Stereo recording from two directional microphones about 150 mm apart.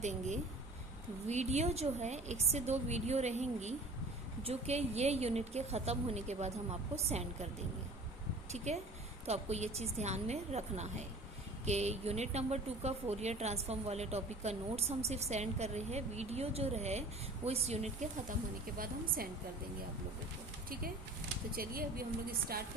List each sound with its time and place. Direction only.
0.0 s a woman's voice: 50° right (ahead or behind)
8.5 s a woman's voice: 50° right (ahead or behind)
18.8 s a woman's voice: 75° right (ahead or behind)
21.5 s a woman's voice: 80° right